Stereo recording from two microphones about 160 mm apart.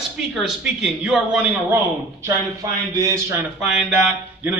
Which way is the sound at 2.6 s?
20° right (ahead or behind).